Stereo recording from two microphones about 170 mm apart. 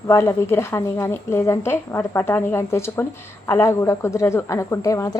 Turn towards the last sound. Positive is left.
turn(degrees=20)  # may be behind; listen again after turning